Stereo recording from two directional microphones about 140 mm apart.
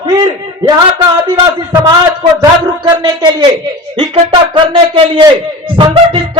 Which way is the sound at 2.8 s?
30° right (ahead or behind).